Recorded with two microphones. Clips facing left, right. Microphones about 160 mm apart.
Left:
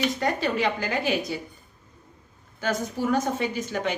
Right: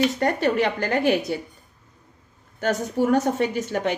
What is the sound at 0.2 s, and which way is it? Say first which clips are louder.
A woman's voice: right 4 dB; 55° right (ahead or behind).